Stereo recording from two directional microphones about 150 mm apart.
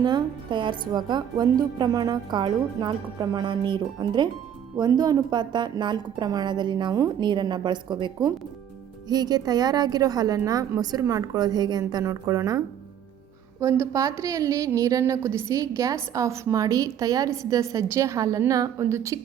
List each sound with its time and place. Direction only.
0.0 s a woman's voice: 30° right (ahead or behind)